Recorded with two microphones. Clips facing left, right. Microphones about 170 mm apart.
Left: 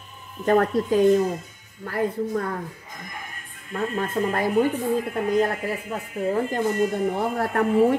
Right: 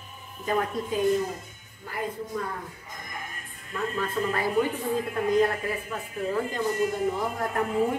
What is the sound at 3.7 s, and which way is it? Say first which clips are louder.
Speech: left 4 dB; 45° left (ahead or behind).